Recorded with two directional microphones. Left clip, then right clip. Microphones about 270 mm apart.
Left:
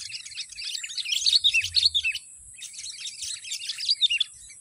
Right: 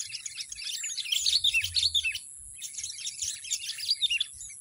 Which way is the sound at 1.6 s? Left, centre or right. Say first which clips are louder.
Left 4 dB; right.